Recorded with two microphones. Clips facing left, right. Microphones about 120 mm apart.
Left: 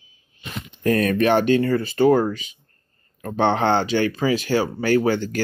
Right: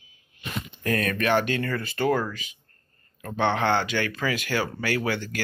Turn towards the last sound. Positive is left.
turn(degrees=35)  # may be behind; listen again after turning